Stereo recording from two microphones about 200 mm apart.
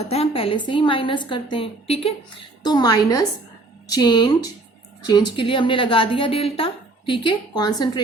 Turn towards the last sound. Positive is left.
turn(degrees=20)  # may be behind; listen again after turning